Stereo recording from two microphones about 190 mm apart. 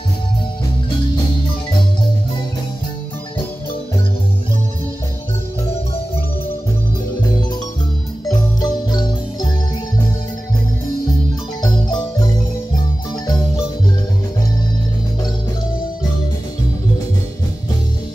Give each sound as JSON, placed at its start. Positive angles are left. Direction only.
{"t": 8.3, "sound": "marimba", "side_deg": 20}